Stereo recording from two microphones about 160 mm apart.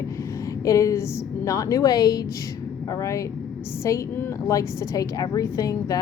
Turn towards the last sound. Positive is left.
turn(degrees=20)  # may be behind; listen again after turning